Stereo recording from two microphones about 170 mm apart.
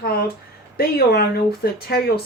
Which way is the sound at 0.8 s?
60° left (ahead or behind).